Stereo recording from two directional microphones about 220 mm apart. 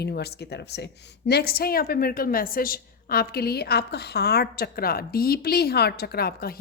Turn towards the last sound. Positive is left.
turn(degrees=45)  # may be behind; listen again after turning